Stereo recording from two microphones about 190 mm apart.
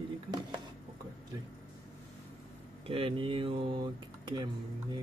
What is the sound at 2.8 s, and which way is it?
Speech, 30° right (ahead or behind).